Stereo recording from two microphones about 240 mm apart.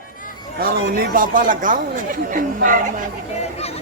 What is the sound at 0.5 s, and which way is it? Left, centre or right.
A man's voice, right.